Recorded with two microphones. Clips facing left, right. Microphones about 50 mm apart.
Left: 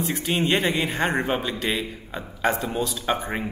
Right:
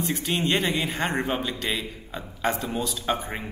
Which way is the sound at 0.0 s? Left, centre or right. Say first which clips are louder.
Left 2 dB; centre.